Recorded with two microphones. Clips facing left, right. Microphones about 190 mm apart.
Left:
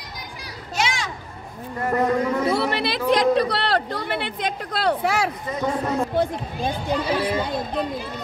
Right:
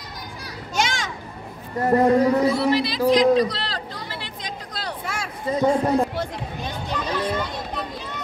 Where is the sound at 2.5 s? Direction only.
65° left (ahead or behind).